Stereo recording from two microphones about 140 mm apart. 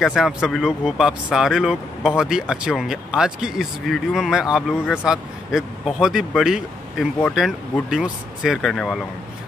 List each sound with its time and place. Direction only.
0.0 s speech: 5° right (ahead or behind)